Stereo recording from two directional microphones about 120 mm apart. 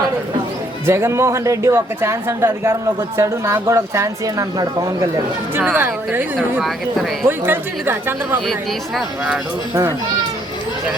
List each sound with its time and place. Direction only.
0.9 s a woman's voice: 20° right (ahead or behind)
5.5 s speech: 15° right (ahead or behind)
6.3 s speech: centre (ahead or behind)
7.3 s speech: 15° right (ahead or behind)